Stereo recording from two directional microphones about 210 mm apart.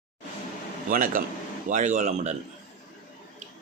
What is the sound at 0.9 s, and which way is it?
Speech, 40° right (ahead or behind).